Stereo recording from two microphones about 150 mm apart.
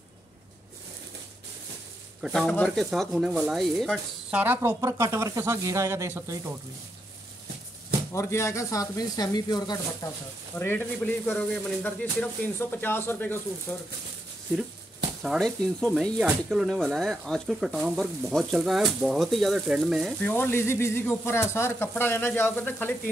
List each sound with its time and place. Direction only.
2.2 s speech: 5° left (ahead or behind)
4.3 s speech: 10° right (ahead or behind)
8.1 s speech: 20° left (ahead or behind)
15.2 s speech: centre (ahead or behind)
20.2 s speech: 10° left (ahead or behind)